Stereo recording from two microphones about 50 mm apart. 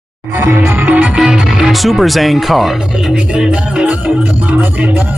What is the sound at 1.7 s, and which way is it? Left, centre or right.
Speech, centre.